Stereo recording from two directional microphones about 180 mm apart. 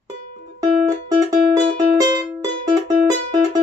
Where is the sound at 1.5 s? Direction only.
20° right (ahead or behind).